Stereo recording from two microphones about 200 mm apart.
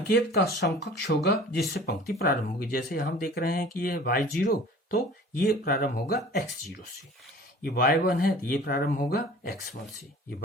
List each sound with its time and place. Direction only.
0.1 s speech: 55° left (ahead or behind)
7.6 s speech: 45° left (ahead or behind)